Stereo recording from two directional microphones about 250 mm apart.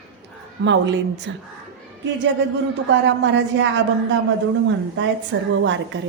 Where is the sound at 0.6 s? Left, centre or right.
Right.